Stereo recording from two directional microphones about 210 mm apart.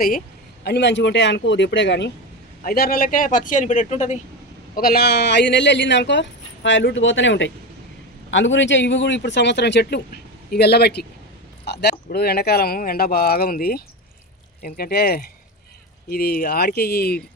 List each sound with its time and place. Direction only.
0.6 s speech: 55° left (ahead or behind)
2.6 s speech: 45° left (ahead or behind)
4.8 s speech: 45° left (ahead or behind)